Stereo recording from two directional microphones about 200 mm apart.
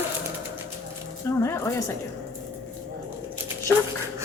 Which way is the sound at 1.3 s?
15° left (ahead or behind).